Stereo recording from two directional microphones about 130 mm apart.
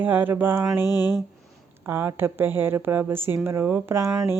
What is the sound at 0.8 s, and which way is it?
Speech, 30° left (ahead or behind).